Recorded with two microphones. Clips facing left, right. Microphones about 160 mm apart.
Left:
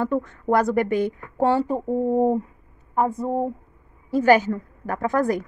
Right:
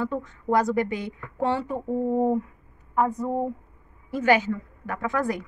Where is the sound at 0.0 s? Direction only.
60° left (ahead or behind).